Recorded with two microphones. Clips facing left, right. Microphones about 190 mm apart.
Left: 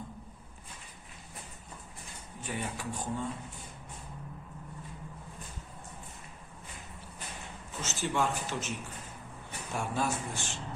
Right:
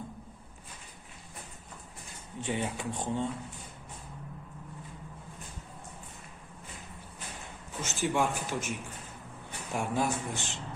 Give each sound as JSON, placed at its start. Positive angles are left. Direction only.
{"t": 2.4, "sound": "speech", "side_deg": -25}
{"t": 7.8, "sound": "speech", "side_deg": -15}
{"t": 9.7, "sound": "speech", "side_deg": -15}